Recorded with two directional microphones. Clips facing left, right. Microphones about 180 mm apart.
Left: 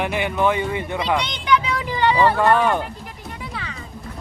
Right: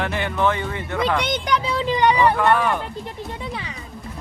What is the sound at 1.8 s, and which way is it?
Speech, 20° right (ahead or behind).